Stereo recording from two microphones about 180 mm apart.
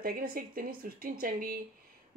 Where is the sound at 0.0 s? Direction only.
55° right (ahead or behind).